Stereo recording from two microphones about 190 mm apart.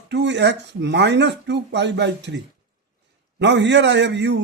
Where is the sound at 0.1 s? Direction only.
65° right (ahead or behind).